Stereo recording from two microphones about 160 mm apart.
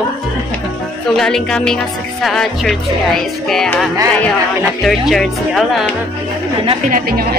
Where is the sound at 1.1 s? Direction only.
5° left (ahead or behind).